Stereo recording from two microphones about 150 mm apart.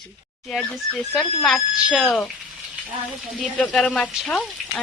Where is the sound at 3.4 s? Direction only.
5° left (ahead or behind).